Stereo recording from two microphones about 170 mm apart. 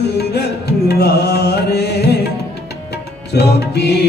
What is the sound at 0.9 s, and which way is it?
Music, 70° left (ahead or behind).